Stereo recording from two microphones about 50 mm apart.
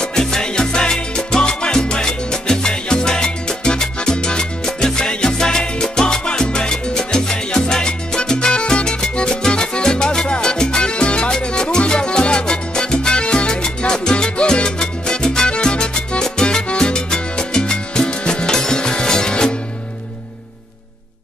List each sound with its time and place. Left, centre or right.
0.0 s music: centre
11.3 s salsa music: centre
16.6 s music: centre